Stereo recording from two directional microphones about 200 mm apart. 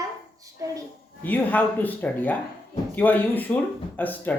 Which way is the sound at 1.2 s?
10° left (ahead or behind).